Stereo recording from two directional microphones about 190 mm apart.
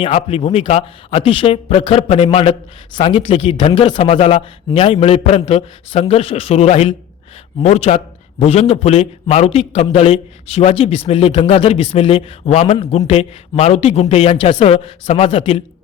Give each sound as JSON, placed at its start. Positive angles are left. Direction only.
{"t": 0.0, "sound": "speech", "side_deg": 30}